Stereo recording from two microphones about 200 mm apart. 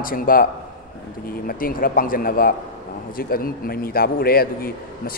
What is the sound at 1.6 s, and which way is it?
A man's voice, 45° left (ahead or behind).